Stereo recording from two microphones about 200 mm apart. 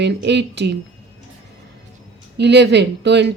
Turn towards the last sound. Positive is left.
turn(degrees=-60)  # may be behind; listen again after turning